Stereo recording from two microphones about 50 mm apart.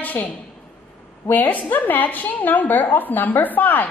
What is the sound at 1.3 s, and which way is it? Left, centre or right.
A woman's voice, left.